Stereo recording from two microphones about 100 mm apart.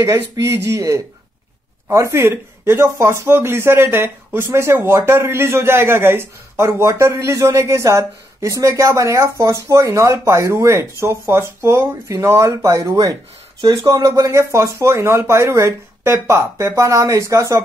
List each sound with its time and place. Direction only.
0.0 s speech: 30° right (ahead or behind)